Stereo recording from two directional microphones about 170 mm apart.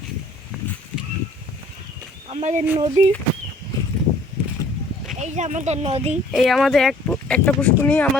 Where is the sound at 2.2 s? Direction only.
40° right (ahead or behind).